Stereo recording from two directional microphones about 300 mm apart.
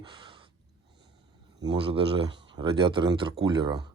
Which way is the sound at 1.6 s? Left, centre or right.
Centre.